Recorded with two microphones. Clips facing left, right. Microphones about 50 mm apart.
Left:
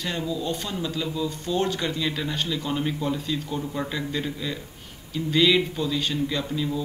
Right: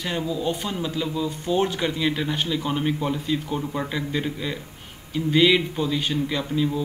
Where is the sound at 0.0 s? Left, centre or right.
Centre.